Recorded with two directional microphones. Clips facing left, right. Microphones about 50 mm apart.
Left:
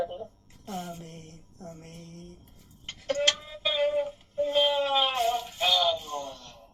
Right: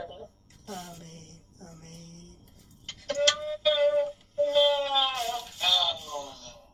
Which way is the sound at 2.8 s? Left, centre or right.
Left.